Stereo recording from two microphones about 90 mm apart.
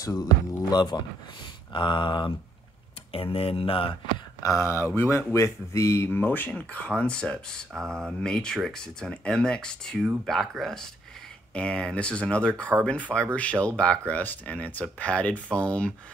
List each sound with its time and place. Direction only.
0.0 s speech: 45° left (ahead or behind)
1.7 s a sound: 60° left (ahead or behind)
3.1 s speech: 90° left
4.4 s speech: 35° left (ahead or behind); by 15.9 s 10° left (ahead or behind)